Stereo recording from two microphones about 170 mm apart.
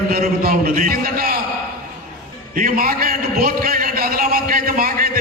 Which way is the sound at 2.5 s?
55° right (ahead or behind).